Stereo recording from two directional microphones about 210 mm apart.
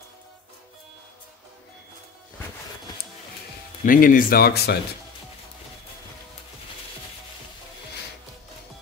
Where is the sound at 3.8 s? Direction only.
40° left (ahead or behind).